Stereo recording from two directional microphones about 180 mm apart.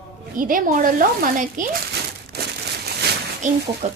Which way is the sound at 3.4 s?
45° right (ahead or behind).